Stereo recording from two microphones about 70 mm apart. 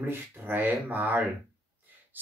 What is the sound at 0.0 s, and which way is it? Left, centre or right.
Speech, right.